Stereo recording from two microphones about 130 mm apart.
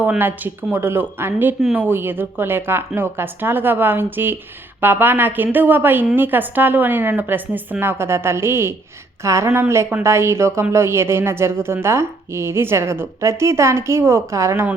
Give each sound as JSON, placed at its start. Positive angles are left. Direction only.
{"t": 0.0, "sound": "a woman's voice", "side_deg": -15}